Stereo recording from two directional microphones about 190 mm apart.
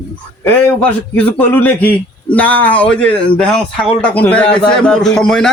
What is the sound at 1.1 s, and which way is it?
A man's voice, 10° left (ahead or behind).